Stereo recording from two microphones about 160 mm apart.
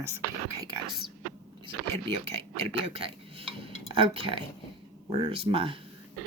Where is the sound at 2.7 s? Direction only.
35° right (ahead or behind).